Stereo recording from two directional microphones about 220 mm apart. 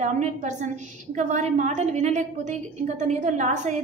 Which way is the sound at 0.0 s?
35° right (ahead or behind).